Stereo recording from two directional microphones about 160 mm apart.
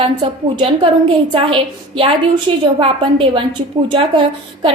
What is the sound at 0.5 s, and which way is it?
A woman's voice, 35° right (ahead or behind).